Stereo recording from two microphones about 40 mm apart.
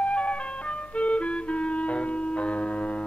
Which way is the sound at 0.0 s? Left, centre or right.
Left.